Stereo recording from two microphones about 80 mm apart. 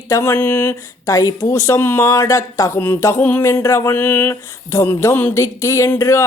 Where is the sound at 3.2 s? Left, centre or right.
Left.